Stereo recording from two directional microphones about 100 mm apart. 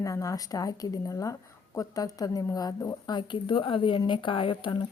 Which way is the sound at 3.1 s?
55° left (ahead or behind).